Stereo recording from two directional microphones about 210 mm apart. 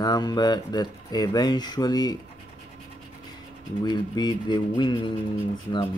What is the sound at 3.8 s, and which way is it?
Speech, 20° left (ahead or behind).